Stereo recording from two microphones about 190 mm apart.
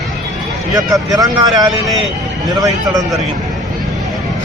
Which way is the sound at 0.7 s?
20° right (ahead or behind).